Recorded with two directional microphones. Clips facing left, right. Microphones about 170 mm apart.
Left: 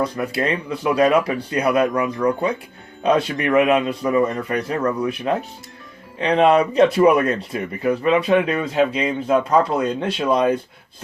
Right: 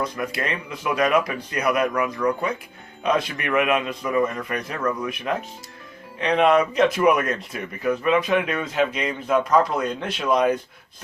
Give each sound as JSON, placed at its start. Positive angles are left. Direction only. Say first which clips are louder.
{"t": 0.0, "sound": "speech", "louder": "left 5 dB", "side_deg": 30}